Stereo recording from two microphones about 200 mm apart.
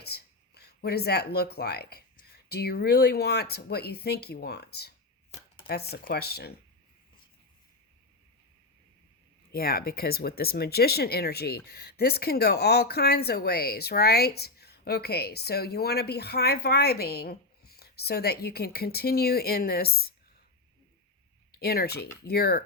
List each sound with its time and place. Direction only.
0.0 s speech: 55° left (ahead or behind)
9.5 s speech: 50° left (ahead or behind)
21.6 s speech: 50° left (ahead or behind)